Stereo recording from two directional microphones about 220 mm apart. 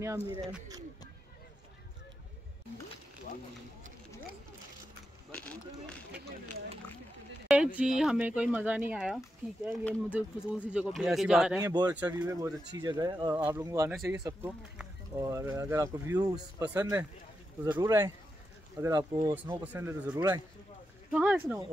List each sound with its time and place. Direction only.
5.3 s speech: 5° left (ahead or behind)
7.4 s speech: 5° right (ahead or behind)
11.6 s speech: 20° right (ahead or behind)
11.9 s speech: 5° right (ahead or behind)